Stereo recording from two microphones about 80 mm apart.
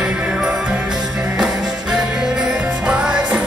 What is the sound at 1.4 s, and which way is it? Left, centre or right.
Music, centre.